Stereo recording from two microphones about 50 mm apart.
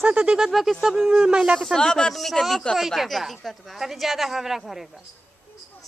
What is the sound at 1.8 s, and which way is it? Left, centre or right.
Speech, centre.